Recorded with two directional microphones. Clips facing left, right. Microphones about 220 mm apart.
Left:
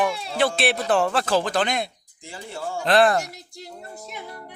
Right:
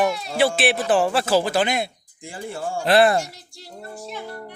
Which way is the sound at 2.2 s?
50° right (ahead or behind).